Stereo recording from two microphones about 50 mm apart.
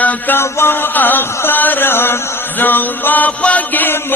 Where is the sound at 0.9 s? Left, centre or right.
Left.